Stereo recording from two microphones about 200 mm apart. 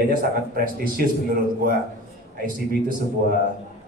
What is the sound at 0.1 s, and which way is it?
Speech, 45° right (ahead or behind).